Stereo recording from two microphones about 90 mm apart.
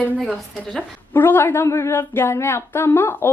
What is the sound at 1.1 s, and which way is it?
A woman's voice, 25° left (ahead or behind).